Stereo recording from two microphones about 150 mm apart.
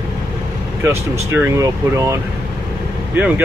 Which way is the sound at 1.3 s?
15° right (ahead or behind).